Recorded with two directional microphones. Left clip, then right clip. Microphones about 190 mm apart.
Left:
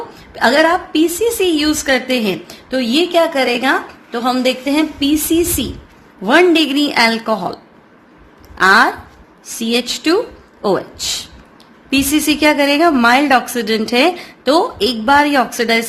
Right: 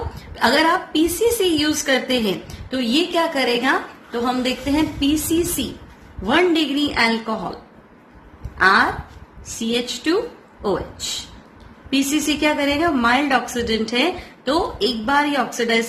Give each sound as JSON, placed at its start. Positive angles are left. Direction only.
{"t": 0.3, "sound": "a woman's voice", "side_deg": 30}
{"t": 8.5, "sound": "a woman's voice", "side_deg": 45}